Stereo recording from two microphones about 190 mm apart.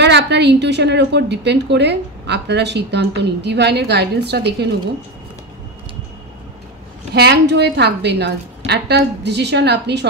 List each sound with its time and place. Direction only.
0.0 s a woman's voice: 65° right (ahead or behind)
7.2 s a woman's voice: 60° right (ahead or behind)